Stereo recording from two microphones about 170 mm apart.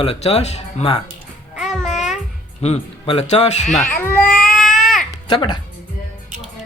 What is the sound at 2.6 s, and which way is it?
Speech, 40° left (ahead or behind).